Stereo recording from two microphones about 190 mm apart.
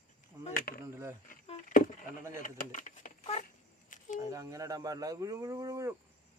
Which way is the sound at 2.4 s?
40° left (ahead or behind).